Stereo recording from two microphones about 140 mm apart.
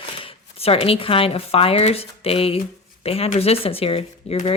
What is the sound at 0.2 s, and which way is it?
Speech, 40° left (ahead or behind).